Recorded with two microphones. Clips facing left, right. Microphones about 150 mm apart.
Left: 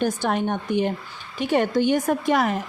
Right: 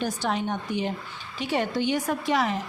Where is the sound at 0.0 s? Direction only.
55° left (ahead or behind).